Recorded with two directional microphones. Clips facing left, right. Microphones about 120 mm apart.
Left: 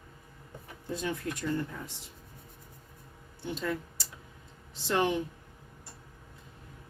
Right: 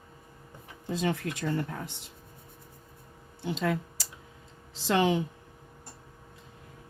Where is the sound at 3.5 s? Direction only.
90° right.